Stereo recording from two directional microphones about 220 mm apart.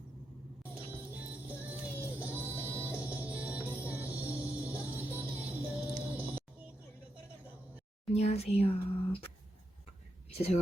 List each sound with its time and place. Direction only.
0.6 s music: 5° right (ahead or behind)
8.1 s speech: 30° left (ahead or behind)
10.3 s speech: 30° left (ahead or behind)